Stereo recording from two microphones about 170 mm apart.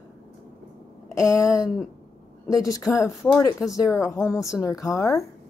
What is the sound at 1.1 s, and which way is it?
Speech, 20° left (ahead or behind).